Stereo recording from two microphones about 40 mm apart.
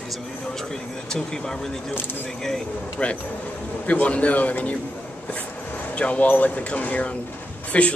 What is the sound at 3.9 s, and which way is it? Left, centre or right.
Speech, left.